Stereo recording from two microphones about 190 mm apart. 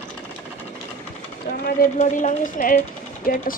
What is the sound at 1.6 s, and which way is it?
Speech, 45° left (ahead or behind).